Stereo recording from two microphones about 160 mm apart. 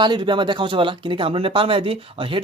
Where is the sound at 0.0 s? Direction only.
30° right (ahead or behind).